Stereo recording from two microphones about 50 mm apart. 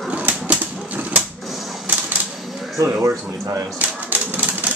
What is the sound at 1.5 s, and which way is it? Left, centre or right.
Typewriter, centre.